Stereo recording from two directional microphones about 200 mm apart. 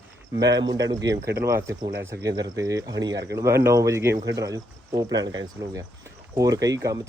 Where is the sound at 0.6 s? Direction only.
20° right (ahead or behind).